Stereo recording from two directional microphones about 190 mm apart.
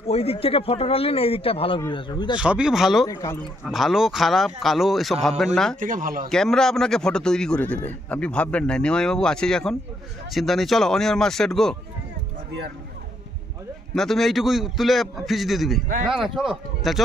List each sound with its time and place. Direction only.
0.0 s a man's voice: 30° left (ahead or behind)
2.3 s speech: 5° right (ahead or behind)
3.1 s a man's voice: 20° left (ahead or behind)
3.6 s speech: centre (ahead or behind)
5.8 s speech: 45° right (ahead or behind)
6.2 s speech: 5° left (ahead or behind)
13.9 s speech: centre (ahead or behind)